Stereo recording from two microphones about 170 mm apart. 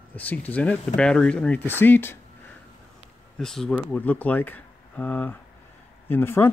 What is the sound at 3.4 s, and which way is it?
Speech, centre (ahead or behind).